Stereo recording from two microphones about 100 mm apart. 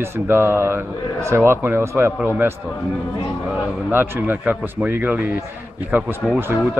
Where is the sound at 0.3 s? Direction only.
25° right (ahead or behind).